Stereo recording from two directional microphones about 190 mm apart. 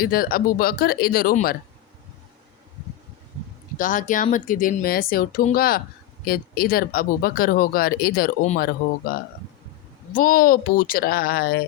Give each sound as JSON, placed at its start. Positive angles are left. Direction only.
{"t": 0.0, "sound": "speech", "side_deg": 50}
{"t": 3.8, "sound": "speech", "side_deg": 45}